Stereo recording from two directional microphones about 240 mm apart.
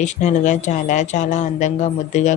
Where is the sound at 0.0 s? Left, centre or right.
Left.